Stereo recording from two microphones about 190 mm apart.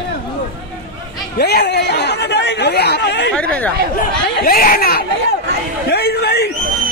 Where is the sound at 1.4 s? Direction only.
60° left (ahead or behind).